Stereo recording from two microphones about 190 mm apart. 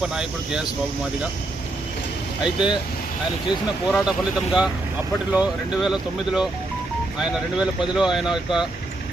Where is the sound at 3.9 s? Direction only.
Centre (ahead or behind).